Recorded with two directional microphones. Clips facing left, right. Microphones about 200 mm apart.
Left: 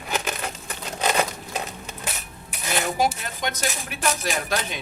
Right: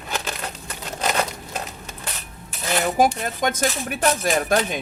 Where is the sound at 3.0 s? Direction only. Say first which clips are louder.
Right 5 dB; 50° right (ahead or behind).